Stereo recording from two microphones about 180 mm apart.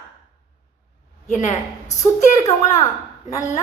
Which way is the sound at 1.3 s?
40° left (ahead or behind).